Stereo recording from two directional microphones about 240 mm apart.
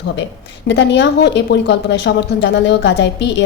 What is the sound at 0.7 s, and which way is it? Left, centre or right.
A woman's voice, left.